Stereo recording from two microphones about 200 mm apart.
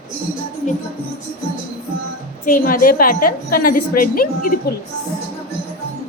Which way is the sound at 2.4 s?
45° left (ahead or behind).